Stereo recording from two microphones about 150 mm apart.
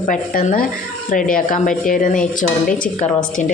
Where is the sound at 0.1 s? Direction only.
70° left (ahead or behind).